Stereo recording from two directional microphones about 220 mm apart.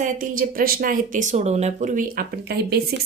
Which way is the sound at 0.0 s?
35° right (ahead or behind).